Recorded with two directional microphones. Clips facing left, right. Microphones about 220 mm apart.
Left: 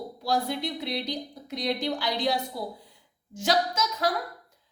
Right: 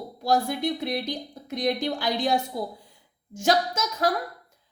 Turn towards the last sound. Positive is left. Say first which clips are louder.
# right 2 dB
turn(degrees=-45)  # may be behind; listen again after turning